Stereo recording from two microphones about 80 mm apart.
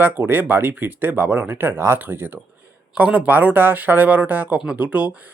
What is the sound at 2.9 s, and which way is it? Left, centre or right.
Speech, centre.